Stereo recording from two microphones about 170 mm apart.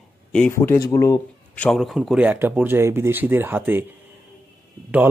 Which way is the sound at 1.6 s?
5° left (ahead or behind).